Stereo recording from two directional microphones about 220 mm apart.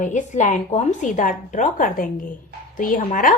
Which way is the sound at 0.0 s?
35° left (ahead or behind).